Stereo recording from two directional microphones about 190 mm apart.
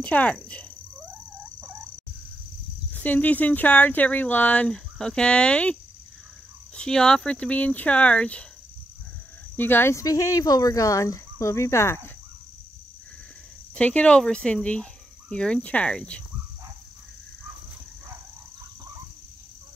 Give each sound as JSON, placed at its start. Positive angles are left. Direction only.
{"t": 0.0, "sound": "speech", "side_deg": 5}
{"t": 2.9, "sound": "speech", "side_deg": 10}
{"t": 6.8, "sound": "speech", "side_deg": 5}
{"t": 9.6, "sound": "speech", "side_deg": 10}
{"t": 13.7, "sound": "speech", "side_deg": 5}